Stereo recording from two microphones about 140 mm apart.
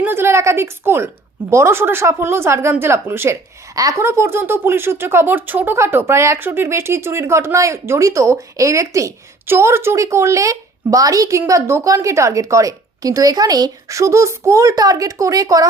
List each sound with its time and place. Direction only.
0.0 s a woman's voice: 15° right (ahead or behind)